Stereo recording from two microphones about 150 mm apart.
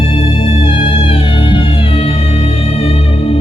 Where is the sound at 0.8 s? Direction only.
35° left (ahead or behind).